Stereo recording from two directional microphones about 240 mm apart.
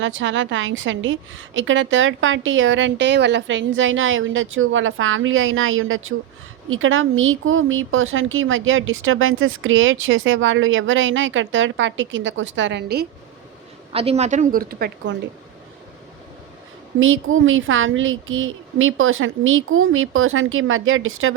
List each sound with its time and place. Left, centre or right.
0.0 s a woman's voice: right
13.9 s a woman's voice: right
17.0 s speech: right